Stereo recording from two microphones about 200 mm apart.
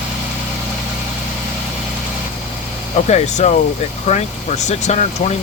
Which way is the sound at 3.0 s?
35° left (ahead or behind).